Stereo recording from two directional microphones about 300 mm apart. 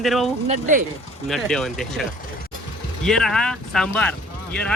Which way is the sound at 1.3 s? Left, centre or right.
Centre.